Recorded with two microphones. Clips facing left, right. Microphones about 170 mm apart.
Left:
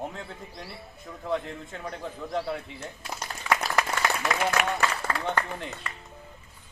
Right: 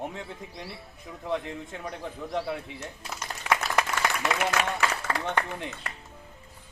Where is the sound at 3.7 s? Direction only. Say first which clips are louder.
Even; centre (ahead or behind).